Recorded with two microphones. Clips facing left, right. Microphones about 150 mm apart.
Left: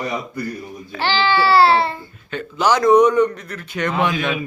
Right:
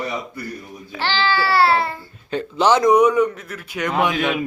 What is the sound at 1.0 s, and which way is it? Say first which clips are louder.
Speech: left 3 dB; 15° left (ahead or behind).